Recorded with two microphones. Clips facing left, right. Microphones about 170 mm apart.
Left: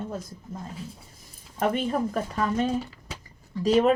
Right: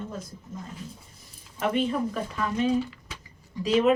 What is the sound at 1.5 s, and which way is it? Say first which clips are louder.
A woman's voice: left 1 dB; 45° left (ahead or behind).